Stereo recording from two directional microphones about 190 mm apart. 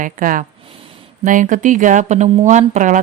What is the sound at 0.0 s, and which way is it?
Speech, 45° right (ahead or behind).